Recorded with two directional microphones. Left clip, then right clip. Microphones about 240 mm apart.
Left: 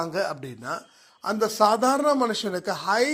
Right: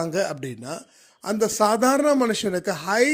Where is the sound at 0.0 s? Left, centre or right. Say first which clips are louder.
Right 2 dB; right.